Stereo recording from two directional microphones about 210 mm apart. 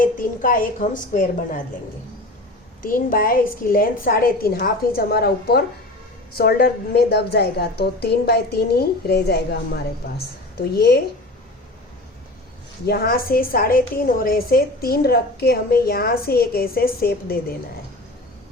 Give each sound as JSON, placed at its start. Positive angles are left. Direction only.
{"t": 0.0, "sound": "speech", "side_deg": 40}
{"t": 2.8, "sound": "a woman's voice", "side_deg": 40}
{"t": 12.8, "sound": "a woman's voice", "side_deg": 50}